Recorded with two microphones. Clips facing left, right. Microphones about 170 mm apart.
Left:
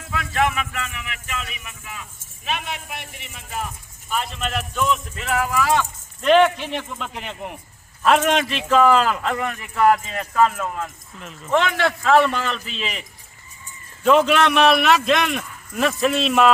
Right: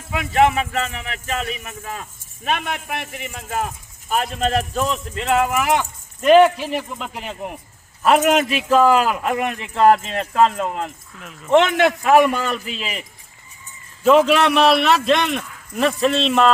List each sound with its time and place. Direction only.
0.1 s speech: 25° right (ahead or behind)
6.2 s a man's voice: 10° right (ahead or behind)
9.7 s a man's voice: 30° right (ahead or behind); by 16.5 s 5° left (ahead or behind)